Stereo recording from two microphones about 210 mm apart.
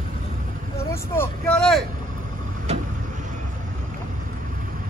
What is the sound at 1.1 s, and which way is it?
Vehicle, 10° left (ahead or behind).